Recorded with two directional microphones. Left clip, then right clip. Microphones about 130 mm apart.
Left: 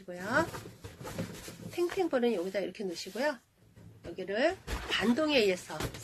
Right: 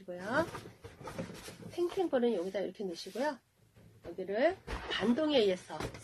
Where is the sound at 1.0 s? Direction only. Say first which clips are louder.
Left 2 dB; 30° left (ahead or behind).